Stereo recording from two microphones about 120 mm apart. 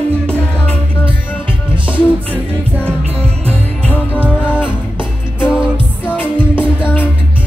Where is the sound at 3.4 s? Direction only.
10° left (ahead or behind).